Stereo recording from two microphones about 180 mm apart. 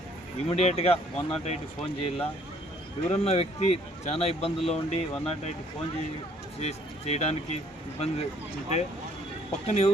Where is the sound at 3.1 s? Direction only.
35° left (ahead or behind).